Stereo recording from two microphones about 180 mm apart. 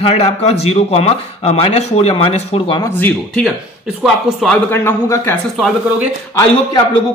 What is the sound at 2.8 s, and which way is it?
Speech, 10° left (ahead or behind).